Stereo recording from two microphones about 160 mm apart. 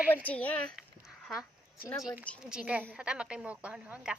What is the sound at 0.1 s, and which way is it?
Speech, 10° left (ahead or behind).